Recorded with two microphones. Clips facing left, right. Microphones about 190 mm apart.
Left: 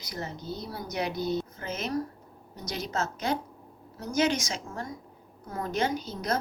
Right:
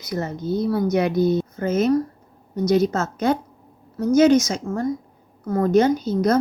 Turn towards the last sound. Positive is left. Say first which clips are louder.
# right 11 dB
turn(degrees=-45)  # may be behind; listen again after turning